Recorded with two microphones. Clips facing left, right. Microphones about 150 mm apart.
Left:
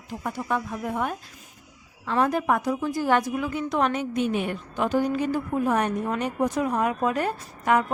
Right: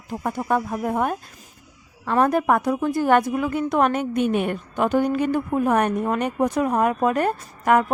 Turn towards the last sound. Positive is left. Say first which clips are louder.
# right 4 dB
turn(degrees=-50)  # may be behind; listen again after turning